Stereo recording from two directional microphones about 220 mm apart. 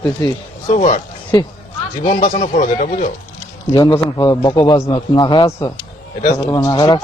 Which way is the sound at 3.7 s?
20° left (ahead or behind).